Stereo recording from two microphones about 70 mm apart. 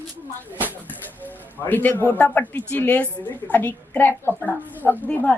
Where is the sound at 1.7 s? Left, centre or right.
Left.